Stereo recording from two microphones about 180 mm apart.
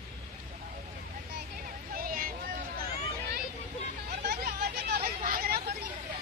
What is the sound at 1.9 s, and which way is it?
Vehicle, 50° right (ahead or behind).